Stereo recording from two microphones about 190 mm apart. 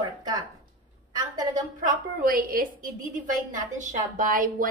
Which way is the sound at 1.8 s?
45° right (ahead or behind).